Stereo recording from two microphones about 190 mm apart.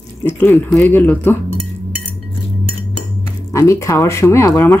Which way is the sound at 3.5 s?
15° left (ahead or behind).